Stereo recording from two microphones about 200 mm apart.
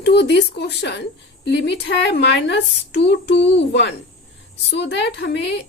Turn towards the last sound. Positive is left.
turn(degrees=60)  # may be behind; listen again after turning